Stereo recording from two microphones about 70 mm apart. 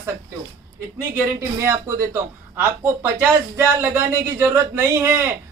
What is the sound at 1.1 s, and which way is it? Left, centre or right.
Speech, right.